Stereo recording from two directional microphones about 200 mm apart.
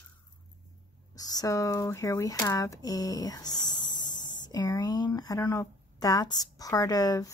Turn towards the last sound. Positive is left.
turn(degrees=15)  # may be behind; listen again after turning